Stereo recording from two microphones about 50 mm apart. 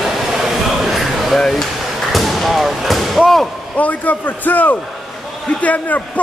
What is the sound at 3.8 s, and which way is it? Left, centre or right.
A man's voice, left.